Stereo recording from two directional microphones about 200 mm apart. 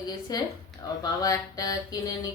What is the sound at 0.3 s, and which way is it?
A woman's voice, 20° left (ahead or behind).